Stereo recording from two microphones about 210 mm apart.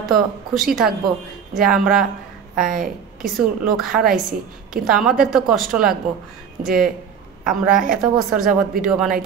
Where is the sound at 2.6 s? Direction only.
40° right (ahead or behind).